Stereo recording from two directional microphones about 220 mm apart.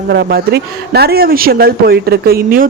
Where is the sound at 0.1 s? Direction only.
45° right (ahead or behind).